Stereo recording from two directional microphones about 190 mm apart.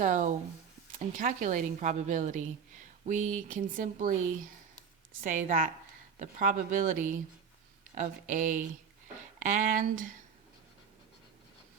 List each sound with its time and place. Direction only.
0.0 s speech: 40° right (ahead or behind)
5.2 s speech: 45° right (ahead or behind)